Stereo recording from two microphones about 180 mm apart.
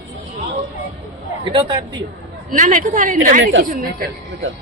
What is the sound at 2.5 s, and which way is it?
Speech, 45° right (ahead or behind).